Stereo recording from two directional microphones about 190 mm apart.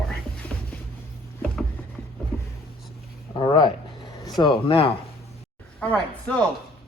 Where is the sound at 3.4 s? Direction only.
25° left (ahead or behind).